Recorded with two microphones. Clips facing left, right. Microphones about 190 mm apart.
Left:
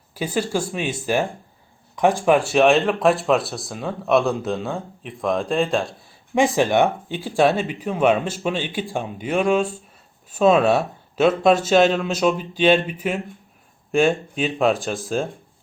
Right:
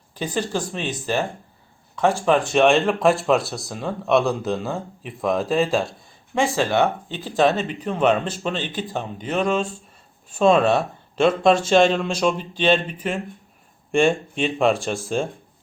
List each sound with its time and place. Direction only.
0.1 s speech: 10° left (ahead or behind)
6.3 s speech: 15° left (ahead or behind); by 15.3 s centre (ahead or behind)